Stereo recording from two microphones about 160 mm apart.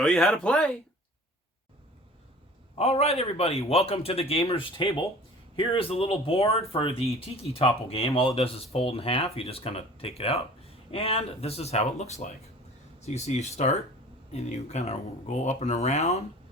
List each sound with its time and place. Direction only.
0.0 s speech: 5° left (ahead or behind)
2.7 s speech: 40° left (ahead or behind)